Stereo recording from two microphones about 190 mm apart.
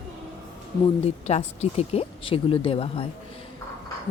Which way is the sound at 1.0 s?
35° left (ahead or behind).